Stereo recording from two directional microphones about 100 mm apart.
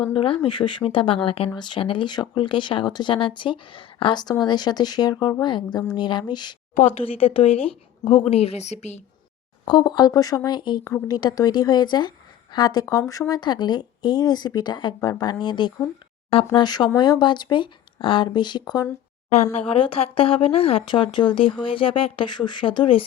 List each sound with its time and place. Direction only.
0.1 s speech: 60° left (ahead or behind)
0.9 s speech: 65° left (ahead or behind)
1.5 s speech: 55° left (ahead or behind)
7.0 s speech: 70° left (ahead or behind); by 8.8 s 90° left
9.6 s a woman's voice: 50° left (ahead or behind)
19.5 s speech: 65° left (ahead or behind)
20.8 s speech: 50° left (ahead or behind)